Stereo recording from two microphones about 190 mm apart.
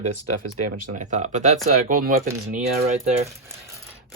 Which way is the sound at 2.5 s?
35° right (ahead or behind).